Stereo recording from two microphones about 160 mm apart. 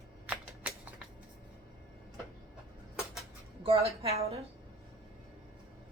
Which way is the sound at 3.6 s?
40° right (ahead or behind).